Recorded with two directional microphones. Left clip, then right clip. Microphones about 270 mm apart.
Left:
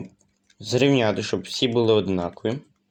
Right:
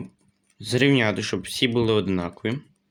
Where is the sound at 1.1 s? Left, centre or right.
Right.